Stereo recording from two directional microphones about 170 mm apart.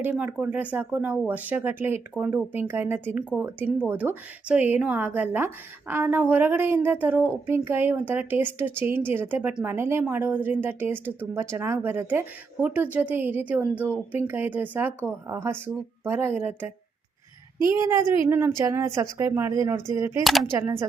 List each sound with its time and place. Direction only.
0.0 s a woman's voice: 10° right (ahead or behind)
17.7 s a woman's voice: 20° right (ahead or behind)
20.2 s speech: centre (ahead or behind)
20.5 s a woman's voice: 15° right (ahead or behind)